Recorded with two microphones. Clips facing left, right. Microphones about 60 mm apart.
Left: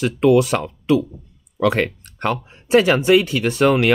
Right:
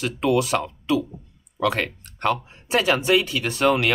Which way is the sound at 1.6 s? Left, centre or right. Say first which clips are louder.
Left 5 dB; left.